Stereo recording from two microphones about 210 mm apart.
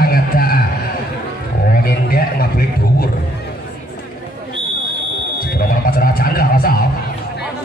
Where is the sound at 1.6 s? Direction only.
45° left (ahead or behind).